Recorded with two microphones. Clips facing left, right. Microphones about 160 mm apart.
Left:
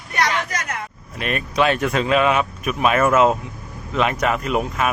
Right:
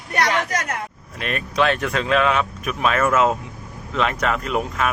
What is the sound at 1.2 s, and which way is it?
Speech, 10° left (ahead or behind).